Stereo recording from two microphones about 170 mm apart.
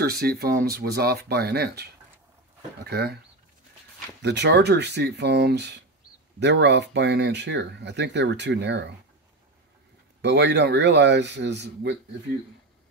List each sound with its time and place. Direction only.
0.0 s speech: 65° right (ahead or behind)
4.2 s speech: 85° right
10.2 s speech: 90° right